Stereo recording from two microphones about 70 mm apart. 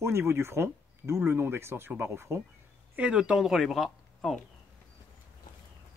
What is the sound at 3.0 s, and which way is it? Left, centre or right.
Speech, centre.